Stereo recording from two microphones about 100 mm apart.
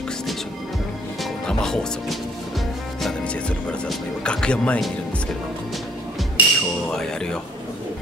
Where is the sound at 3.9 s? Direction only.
10° left (ahead or behind).